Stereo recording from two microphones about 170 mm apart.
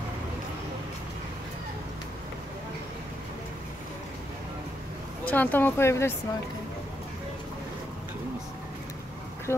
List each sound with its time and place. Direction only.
5.2 s speech: 10° left (ahead or behind)
9.5 s speech: 15° left (ahead or behind)